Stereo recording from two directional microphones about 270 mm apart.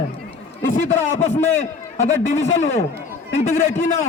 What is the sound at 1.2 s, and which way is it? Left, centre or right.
A man's voice, left.